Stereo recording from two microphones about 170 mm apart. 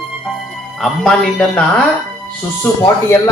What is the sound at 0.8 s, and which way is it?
Speech, centre (ahead or behind).